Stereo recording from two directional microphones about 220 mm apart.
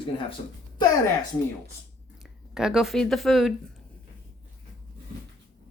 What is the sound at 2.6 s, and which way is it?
Speech, centre (ahead or behind).